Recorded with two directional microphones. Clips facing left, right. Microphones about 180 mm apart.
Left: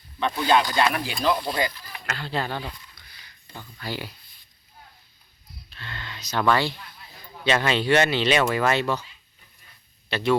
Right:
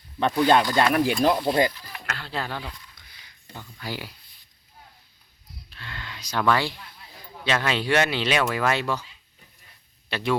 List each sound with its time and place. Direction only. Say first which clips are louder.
0.2 s speech: right 2 dB; 45° right (ahead or behind)
2.0 s speech: left 3 dB; centre (ahead or behind)
3.8 s speech: left 1 dB; 10° right (ahead or behind)
5.7 s a sound: left 1 dB; 10° right (ahead or behind)
7.4 s speech: left 3 dB; centre (ahead or behind)
10.1 s speech: left 3 dB; 10° right (ahead or behind)